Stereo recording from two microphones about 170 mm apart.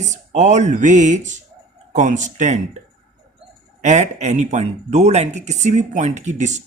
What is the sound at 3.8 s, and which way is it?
Speech, 45° right (ahead or behind).